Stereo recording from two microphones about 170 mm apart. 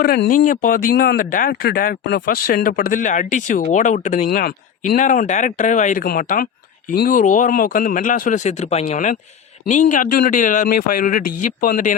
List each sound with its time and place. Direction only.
0.0 s speech: 55° left (ahead or behind)
4.3 s speech: 65° left (ahead or behind)
4.9 s speech: 50° left (ahead or behind)